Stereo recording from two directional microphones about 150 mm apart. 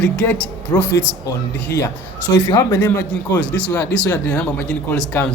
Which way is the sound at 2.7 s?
15° left (ahead or behind).